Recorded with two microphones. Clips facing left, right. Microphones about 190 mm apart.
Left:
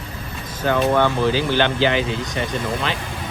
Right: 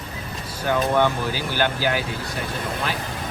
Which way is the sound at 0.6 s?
10° right (ahead or behind).